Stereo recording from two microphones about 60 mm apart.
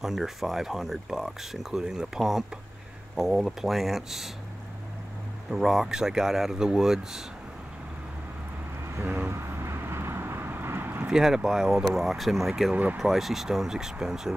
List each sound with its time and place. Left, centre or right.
0.0 s speech: centre
5.5 s speech: centre
8.9 s vehicle: right
11.1 s speech: centre